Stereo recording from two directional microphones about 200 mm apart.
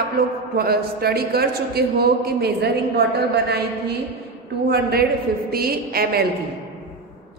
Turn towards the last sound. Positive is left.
turn(degrees=-50)  # may be behind; listen again after turning